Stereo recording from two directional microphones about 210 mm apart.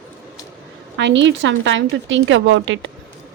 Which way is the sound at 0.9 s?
60° right (ahead or behind).